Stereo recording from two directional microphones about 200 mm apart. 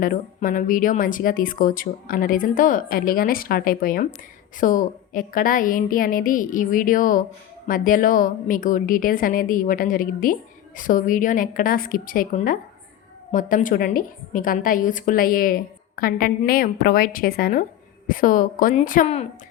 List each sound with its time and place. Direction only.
0.0 s a woman's voice: 45° left (ahead or behind)